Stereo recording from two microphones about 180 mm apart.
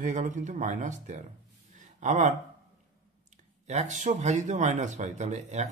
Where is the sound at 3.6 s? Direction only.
40° right (ahead or behind).